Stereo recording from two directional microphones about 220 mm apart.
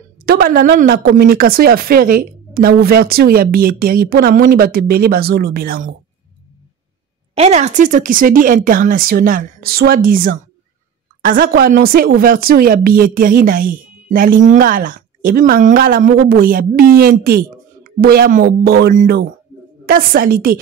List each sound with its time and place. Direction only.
0.2 s a woman's voice: 45° right (ahead or behind)
7.3 s a woman's voice: 30° right (ahead or behind)